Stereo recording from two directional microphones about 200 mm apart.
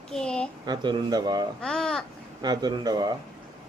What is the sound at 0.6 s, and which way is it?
Speech, 20° right (ahead or behind).